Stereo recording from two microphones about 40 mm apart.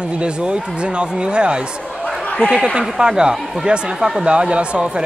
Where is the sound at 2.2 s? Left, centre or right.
Left.